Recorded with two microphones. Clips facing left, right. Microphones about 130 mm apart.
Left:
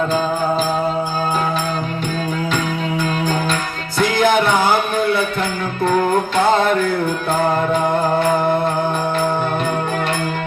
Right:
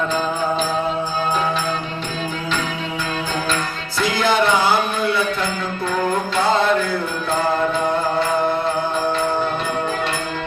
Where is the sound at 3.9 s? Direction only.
50° left (ahead or behind).